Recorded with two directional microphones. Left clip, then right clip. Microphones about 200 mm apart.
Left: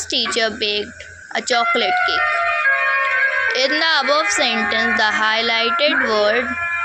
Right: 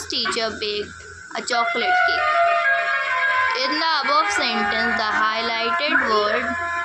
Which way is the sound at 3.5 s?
20° left (ahead or behind).